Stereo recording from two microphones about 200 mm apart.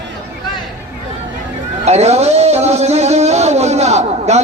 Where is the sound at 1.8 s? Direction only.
30° right (ahead or behind).